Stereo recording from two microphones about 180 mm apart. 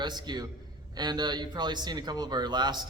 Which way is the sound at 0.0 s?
25° right (ahead or behind).